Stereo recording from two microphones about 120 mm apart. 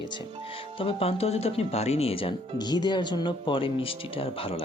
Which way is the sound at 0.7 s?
50° left (ahead or behind).